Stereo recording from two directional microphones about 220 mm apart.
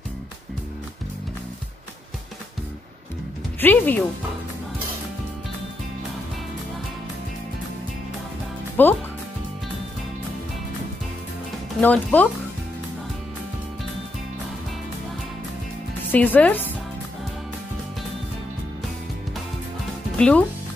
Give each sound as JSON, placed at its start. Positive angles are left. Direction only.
{"t": 3.6, "sound": "speech", "side_deg": 10}
{"t": 8.8, "sound": "speech", "side_deg": 10}
{"t": 11.8, "sound": "speech", "side_deg": 5}
{"t": 16.1, "sound": "speech", "side_deg": 5}
{"t": 20.2, "sound": "speech", "side_deg": 5}